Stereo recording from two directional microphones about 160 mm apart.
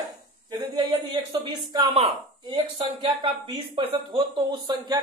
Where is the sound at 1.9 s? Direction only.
35° right (ahead or behind).